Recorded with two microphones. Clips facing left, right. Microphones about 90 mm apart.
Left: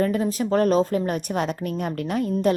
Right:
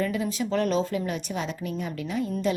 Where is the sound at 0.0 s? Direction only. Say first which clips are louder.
Left 5 dB; 45° left (ahead or behind).